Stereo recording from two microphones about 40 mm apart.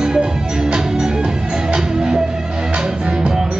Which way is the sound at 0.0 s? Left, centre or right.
Centre.